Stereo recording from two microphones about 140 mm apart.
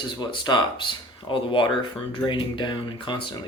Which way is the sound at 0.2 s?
35° left (ahead or behind).